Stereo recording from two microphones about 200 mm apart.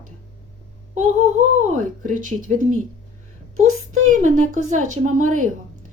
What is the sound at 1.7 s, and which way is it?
Speech, 40° right (ahead or behind).